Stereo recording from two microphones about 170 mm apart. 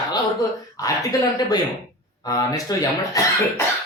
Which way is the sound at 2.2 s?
20° left (ahead or behind).